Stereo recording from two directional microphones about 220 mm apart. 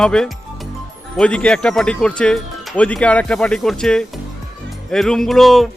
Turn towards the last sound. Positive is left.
turn(degrees=0)  # may be behind; listen again after turning